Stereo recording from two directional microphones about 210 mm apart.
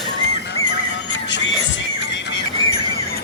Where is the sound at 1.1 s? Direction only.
60° left (ahead or behind).